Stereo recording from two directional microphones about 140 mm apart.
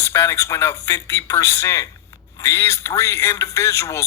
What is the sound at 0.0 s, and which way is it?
A man's voice, 20° left (ahead or behind).